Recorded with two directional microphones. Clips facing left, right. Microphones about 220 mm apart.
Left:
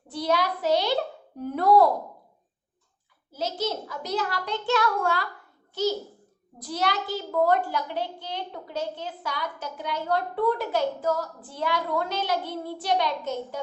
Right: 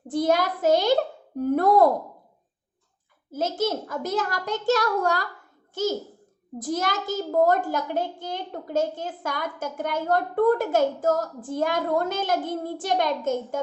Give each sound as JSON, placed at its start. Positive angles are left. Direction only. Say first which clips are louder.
{"t": 0.1, "sound": "a child's voice", "louder": "right 4 dB", "side_deg": -45}
{"t": 3.3, "sound": "a child's voice", "louder": "right 4 dB", "side_deg": -50}